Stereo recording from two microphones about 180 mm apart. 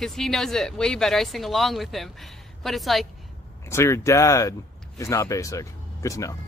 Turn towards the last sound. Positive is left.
turn(degrees=20)  # may be behind; listen again after turning